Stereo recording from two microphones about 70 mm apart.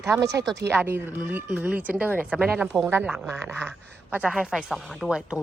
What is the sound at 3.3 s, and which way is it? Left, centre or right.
Speech, right.